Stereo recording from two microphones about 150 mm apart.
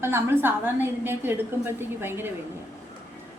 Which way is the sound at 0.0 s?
15° right (ahead or behind).